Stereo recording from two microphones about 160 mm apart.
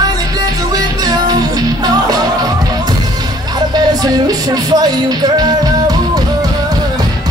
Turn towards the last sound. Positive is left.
turn(degrees=-25)  # may be behind; listen again after turning